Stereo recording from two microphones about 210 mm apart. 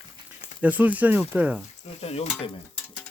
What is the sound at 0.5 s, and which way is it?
Speech, 5° right (ahead or behind).